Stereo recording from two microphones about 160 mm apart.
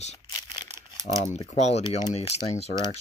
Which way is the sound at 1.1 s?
55° left (ahead or behind).